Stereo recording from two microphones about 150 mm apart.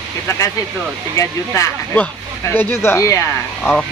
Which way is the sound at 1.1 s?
20° left (ahead or behind).